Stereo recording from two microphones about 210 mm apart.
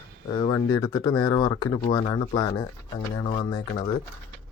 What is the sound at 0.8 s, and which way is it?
Speech, 20° left (ahead or behind).